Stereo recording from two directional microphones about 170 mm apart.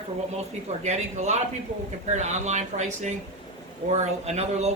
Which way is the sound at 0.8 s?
40° right (ahead or behind).